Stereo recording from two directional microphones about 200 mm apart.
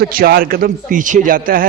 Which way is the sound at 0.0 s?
50° right (ahead or behind).